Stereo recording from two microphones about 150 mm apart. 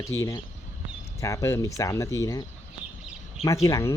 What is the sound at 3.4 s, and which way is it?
Speech, 20° left (ahead or behind).